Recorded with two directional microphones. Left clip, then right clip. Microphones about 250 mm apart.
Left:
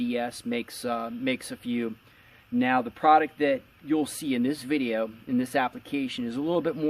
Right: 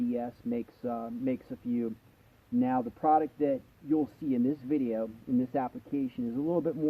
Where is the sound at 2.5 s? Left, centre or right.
Centre.